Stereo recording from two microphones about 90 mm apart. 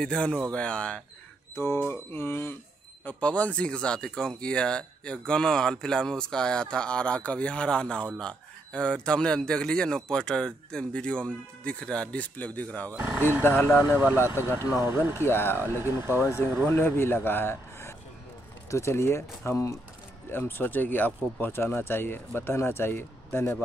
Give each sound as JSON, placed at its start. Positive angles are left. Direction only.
{"t": 0.0, "sound": "speech", "side_deg": 10}
{"t": 1.5, "sound": "speech", "side_deg": 30}
{"t": 3.1, "sound": "speech", "side_deg": 15}
{"t": 14.8, "sound": "speech", "side_deg": -25}
{"t": 15.1, "sound": "speech", "side_deg": 25}
{"t": 15.8, "sound": "speech", "side_deg": -25}
{"t": 16.6, "sound": "speech", "side_deg": 25}